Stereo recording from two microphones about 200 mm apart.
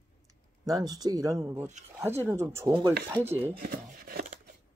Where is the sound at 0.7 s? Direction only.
20° right (ahead or behind).